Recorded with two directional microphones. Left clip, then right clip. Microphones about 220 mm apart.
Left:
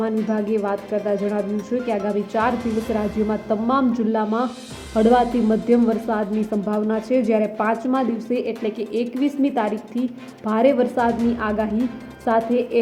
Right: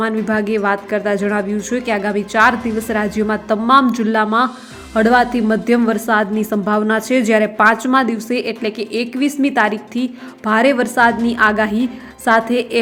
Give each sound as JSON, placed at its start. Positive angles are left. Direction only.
{"t": 0.0, "sound": "a woman's voice", "side_deg": -15}
{"t": 6.5, "sound": "a woman's voice", "side_deg": -30}
{"t": 7.1, "sound": "a woman's voice", "side_deg": -20}